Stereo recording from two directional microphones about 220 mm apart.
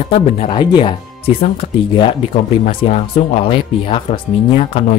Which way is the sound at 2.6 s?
30° left (ahead or behind).